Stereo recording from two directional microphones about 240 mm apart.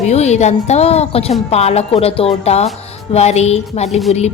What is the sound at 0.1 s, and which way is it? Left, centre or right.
A woman's voice, left.